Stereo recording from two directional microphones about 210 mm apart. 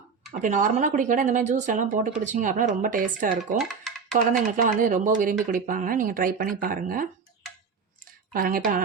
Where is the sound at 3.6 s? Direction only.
Centre (ahead or behind).